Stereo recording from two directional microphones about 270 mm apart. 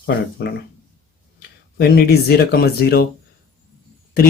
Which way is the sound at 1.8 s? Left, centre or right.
Left.